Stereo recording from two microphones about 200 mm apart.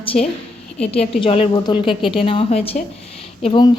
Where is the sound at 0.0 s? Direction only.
30° left (ahead or behind).